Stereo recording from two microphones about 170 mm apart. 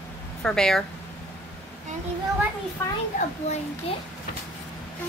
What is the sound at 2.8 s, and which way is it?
Speech, 15° left (ahead or behind).